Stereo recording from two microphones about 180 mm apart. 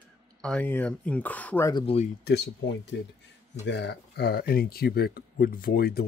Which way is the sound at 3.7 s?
70° left (ahead or behind).